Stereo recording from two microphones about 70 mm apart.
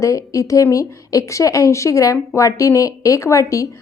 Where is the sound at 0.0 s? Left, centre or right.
Left.